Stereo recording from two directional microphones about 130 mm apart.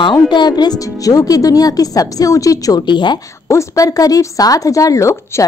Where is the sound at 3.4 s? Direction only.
25° left (ahead or behind).